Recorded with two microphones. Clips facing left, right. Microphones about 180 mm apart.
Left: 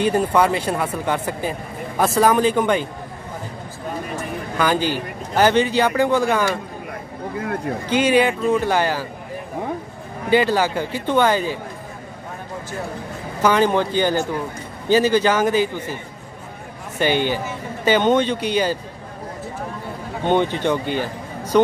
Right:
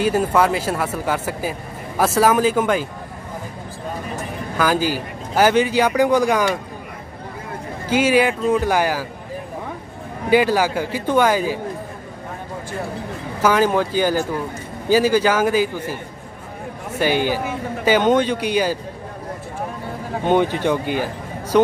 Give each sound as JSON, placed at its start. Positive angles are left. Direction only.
{"t": 0.0, "sound": "speech", "side_deg": -5}
{"t": 4.6, "sound": "a man's voice", "side_deg": -5}
{"t": 7.9, "sound": "a man's voice", "side_deg": -5}
{"t": 10.3, "sound": "a man's voice", "side_deg": -10}
{"t": 13.4, "sound": "a man's voice", "side_deg": -5}
{"t": 17.0, "sound": "a man's voice", "side_deg": -5}
{"t": 20.5, "sound": "a man's voice", "side_deg": -5}